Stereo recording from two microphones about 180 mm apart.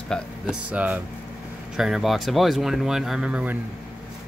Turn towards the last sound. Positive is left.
turn(degrees=-5)  # may be behind; listen again after turning